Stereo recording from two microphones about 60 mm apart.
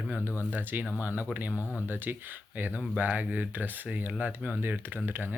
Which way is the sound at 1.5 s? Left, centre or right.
Left.